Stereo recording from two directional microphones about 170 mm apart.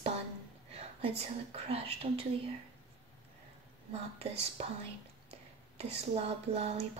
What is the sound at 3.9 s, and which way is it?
Speech, 40° right (ahead or behind).